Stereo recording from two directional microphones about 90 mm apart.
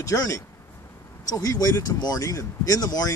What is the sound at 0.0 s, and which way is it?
Speech, 35° left (ahead or behind).